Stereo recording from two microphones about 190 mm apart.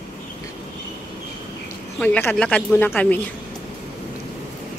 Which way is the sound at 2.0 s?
10° left (ahead or behind).